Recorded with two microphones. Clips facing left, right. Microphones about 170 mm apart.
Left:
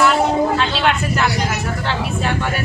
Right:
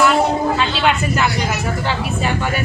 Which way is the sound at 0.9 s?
Centre (ahead or behind).